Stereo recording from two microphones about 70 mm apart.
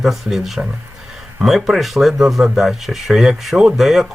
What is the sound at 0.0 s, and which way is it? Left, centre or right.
Speech, centre.